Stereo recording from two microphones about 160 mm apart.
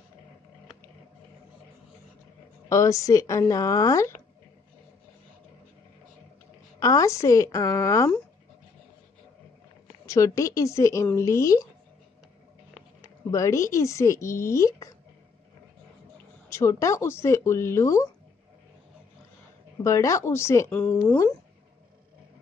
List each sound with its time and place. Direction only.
2.7 s speech: 20° left (ahead or behind)
6.8 s speech: 20° left (ahead or behind)
10.0 s speech: 20° left (ahead or behind)
13.3 s speech: 20° left (ahead or behind)
16.4 s speech: 15° left (ahead or behind)
19.8 s speech: 20° left (ahead or behind)